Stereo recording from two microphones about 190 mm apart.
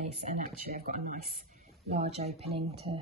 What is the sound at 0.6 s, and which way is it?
Speech, 50° right (ahead or behind).